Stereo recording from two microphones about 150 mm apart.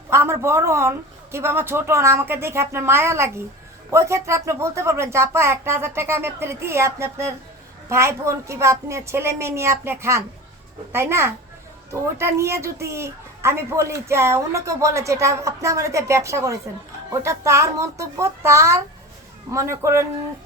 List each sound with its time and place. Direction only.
0.1 s a woman's voice: 15° right (ahead or behind)